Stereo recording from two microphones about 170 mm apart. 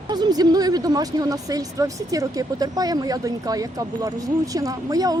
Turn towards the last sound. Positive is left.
turn(degrees=-20)  # may be behind; listen again after turning